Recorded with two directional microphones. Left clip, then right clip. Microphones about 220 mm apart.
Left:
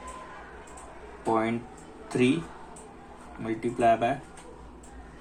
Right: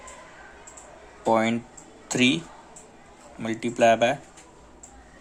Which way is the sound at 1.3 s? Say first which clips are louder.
Right 5 dB; 55° right (ahead or behind).